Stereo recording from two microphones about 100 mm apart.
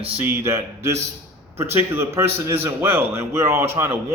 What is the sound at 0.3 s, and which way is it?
A man's voice, 25° right (ahead or behind).